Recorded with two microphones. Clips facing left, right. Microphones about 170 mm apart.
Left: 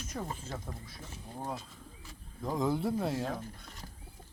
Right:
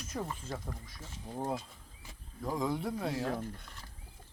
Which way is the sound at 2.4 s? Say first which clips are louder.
Left 2 dB; centre (ahead or behind).